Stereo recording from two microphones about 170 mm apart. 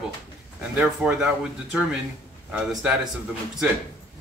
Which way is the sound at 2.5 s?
5° right (ahead or behind).